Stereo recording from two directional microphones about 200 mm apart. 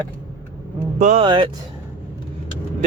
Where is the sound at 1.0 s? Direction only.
35° right (ahead or behind).